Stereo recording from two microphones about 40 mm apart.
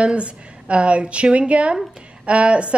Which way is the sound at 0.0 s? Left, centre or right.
Right.